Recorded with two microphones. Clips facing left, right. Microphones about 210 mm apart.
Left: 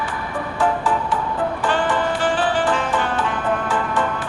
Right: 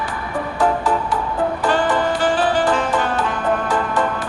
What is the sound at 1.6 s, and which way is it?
Music, 40° right (ahead or behind).